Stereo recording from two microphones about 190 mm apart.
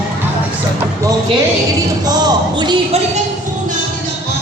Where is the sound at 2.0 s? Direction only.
20° right (ahead or behind).